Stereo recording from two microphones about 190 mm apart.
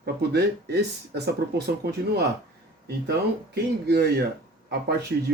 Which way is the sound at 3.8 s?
60° right (ahead or behind).